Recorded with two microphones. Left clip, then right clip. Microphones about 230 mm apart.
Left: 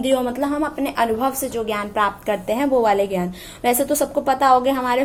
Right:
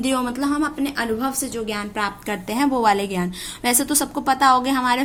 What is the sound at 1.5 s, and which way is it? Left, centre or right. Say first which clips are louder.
A woman's voice: left 4 dB; right.